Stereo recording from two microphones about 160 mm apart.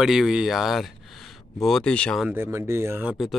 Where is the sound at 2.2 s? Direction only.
15° right (ahead or behind).